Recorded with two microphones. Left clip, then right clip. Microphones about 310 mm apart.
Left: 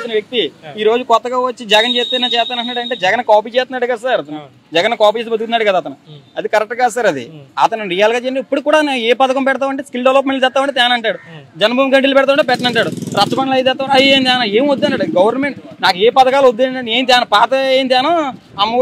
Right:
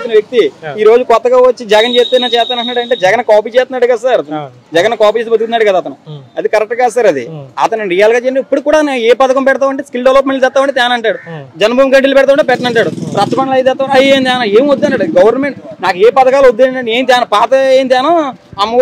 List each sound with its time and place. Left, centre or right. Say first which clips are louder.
0.1 s a man's voice: right 9 dB; left
16.4 s a man's voice: right 5 dB; left